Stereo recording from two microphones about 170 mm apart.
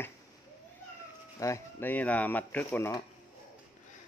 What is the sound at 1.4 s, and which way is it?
Speech, 15° left (ahead or behind).